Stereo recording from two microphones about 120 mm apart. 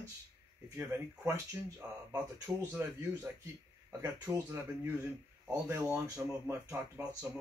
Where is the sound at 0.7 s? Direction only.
20° right (ahead or behind).